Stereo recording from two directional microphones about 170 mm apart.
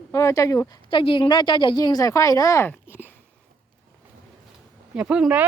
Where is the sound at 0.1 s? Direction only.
20° left (ahead or behind).